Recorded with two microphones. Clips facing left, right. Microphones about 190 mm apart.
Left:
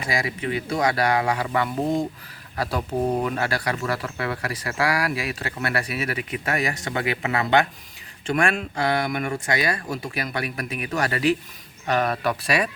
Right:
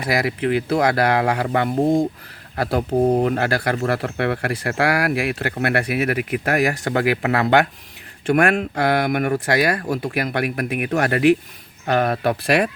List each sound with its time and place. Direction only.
0.0 s speech: 65° right (ahead or behind)